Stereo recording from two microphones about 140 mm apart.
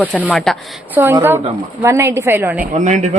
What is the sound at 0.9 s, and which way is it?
A woman's voice, 15° right (ahead or behind).